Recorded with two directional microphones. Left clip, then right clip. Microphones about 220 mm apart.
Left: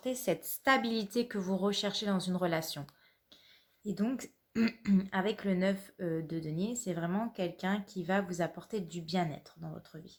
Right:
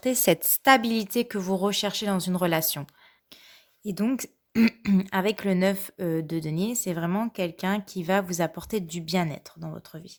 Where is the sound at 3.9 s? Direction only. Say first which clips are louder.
Right 8 dB; 45° right (ahead or behind).